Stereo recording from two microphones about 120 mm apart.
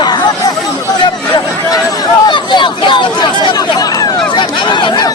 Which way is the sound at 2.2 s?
40° left (ahead or behind).